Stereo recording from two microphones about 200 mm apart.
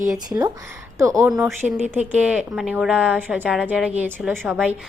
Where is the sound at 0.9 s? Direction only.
15° right (ahead or behind).